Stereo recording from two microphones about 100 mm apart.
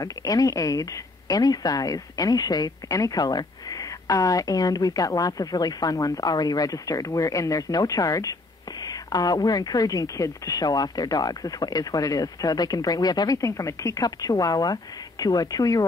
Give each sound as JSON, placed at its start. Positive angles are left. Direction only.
{"t": 0.0, "sound": "speech", "side_deg": 35}